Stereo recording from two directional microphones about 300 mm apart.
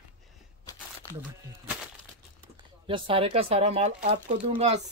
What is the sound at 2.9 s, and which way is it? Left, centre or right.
Speech, centre.